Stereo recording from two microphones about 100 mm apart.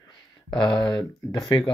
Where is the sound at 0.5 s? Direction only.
55° left (ahead or behind).